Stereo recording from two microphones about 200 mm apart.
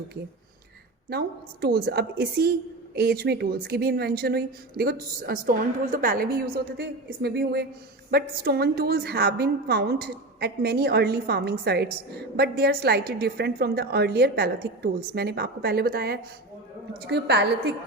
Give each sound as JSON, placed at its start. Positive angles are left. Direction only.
{"t": 1.6, "sound": "a woman's voice", "side_deg": -50}